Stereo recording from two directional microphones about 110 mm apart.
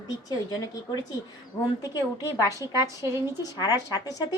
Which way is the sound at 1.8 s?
35° left (ahead or behind).